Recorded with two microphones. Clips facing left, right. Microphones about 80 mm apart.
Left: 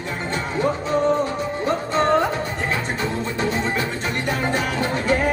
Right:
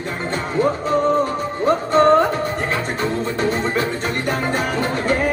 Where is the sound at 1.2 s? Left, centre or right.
Right.